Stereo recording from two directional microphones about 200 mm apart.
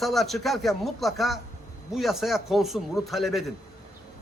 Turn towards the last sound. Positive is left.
turn(degrees=0)  # may be behind; listen again after turning